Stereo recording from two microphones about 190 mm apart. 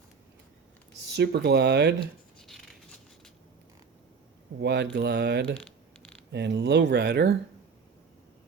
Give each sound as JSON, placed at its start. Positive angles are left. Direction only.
{"t": 1.1, "sound": "speech", "side_deg": -60}
{"t": 2.4, "sound": "a sound", "side_deg": 0}
{"t": 4.6, "sound": "speech", "side_deg": -65}